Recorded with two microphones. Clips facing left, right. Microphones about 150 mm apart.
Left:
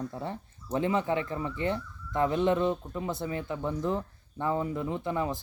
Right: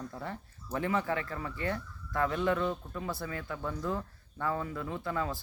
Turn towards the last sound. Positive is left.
turn(degrees=20)  # may be behind; listen again after turning